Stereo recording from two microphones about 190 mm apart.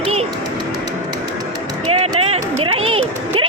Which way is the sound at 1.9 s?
35° right (ahead or behind).